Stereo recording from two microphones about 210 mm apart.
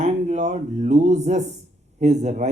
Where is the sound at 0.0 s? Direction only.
35° right (ahead or behind).